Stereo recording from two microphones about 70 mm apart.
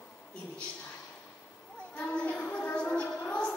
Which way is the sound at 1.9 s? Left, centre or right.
Centre.